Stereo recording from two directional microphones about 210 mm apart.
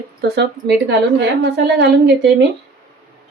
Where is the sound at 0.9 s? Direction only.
55° right (ahead or behind).